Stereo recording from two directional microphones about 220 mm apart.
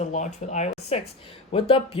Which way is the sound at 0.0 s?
30° left (ahead or behind).